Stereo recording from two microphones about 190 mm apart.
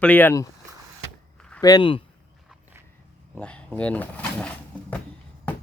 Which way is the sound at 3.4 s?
5° left (ahead or behind).